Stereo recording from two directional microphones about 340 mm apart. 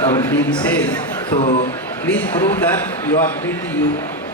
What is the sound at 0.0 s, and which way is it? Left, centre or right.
Speech, centre.